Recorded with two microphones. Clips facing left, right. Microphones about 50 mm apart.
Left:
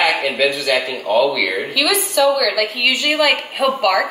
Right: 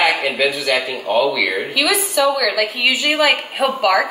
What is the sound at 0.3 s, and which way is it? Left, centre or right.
A woman's voice, centre.